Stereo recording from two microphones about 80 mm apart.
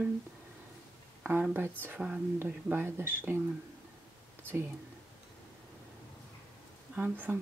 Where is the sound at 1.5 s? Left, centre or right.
Right.